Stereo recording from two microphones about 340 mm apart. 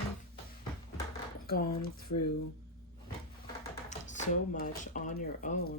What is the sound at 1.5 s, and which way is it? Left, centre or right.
Speech, left.